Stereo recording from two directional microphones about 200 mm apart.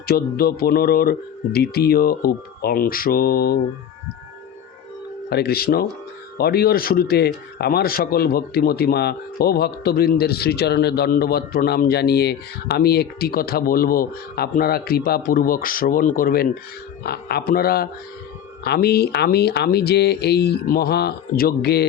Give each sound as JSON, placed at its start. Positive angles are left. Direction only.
{"t": 0.0, "sound": "a man's voice", "side_deg": 50}
{"t": 5.3, "sound": "a man's voice", "side_deg": 50}